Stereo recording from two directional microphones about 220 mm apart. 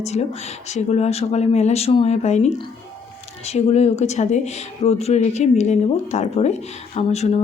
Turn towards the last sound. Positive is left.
turn(degrees=30)  # may be behind; listen again after turning